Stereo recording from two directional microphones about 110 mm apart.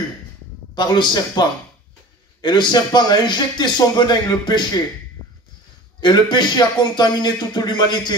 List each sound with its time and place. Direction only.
0.7 s a man's voice: 40° left (ahead or behind)
2.4 s a man's voice: 40° left (ahead or behind)
5.9 s a man's voice: 40° left (ahead or behind)